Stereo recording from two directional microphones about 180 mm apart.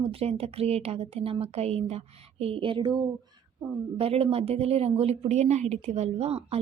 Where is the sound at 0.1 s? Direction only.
35° right (ahead or behind).